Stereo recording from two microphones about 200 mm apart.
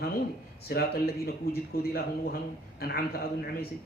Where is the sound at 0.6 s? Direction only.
50° left (ahead or behind).